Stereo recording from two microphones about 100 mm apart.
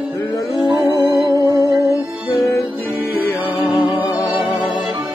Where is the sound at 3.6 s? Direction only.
Centre (ahead or behind).